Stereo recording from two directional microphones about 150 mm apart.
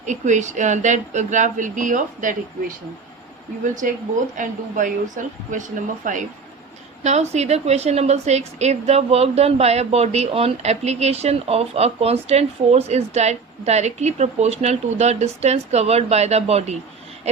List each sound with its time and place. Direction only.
0.0 s speech: 55° right (ahead or behind)
3.6 s speech: 60° right (ahead or behind)
7.0 s a woman's voice: 50° right (ahead or behind)